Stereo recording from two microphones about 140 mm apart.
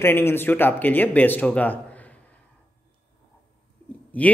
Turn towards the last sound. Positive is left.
turn(degrees=10)  # may be behind; listen again after turning